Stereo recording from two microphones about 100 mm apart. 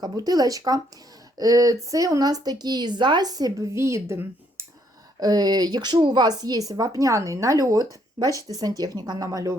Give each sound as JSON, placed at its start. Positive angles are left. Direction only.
{"t": 0.0, "sound": "speech", "side_deg": -40}
{"t": 5.2, "sound": "speech", "side_deg": -45}